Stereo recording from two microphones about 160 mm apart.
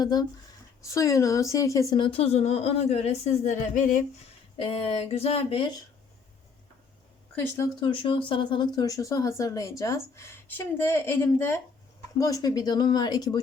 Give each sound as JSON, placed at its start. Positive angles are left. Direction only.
{"t": 0.0, "sound": "speech", "side_deg": 25}
{"t": 2.0, "sound": "a woman's voice", "side_deg": 35}
{"t": 4.5, "sound": "a woman's voice", "side_deg": 35}
{"t": 7.8, "sound": "a woman's voice", "side_deg": 30}